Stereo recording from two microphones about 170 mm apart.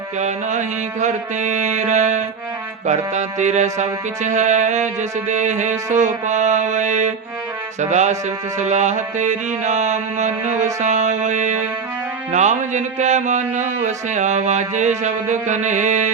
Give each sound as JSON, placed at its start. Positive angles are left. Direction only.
{"t": 0.2, "sound": "music", "side_deg": -45}